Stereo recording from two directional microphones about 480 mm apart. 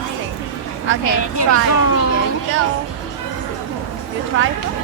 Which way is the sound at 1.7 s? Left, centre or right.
Left.